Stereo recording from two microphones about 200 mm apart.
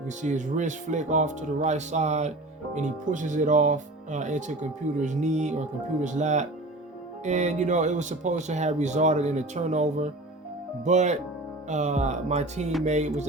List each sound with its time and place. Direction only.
0.2 s speech: 40° right (ahead or behind)